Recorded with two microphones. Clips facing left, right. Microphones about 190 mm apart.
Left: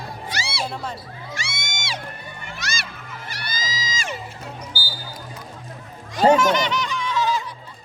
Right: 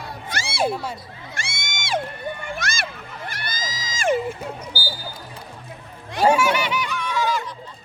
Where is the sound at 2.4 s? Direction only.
50° right (ahead or behind).